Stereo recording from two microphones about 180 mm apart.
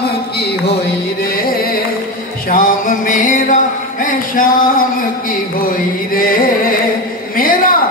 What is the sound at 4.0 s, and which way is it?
Mantra, 50° left (ahead or behind).